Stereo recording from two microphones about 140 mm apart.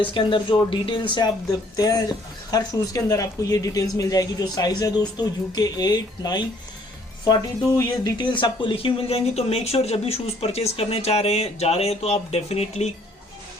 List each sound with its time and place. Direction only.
0.0 s speech: 40° left (ahead or behind)
7.8 s speech: 30° left (ahead or behind); by 12.9 s 45° left (ahead or behind)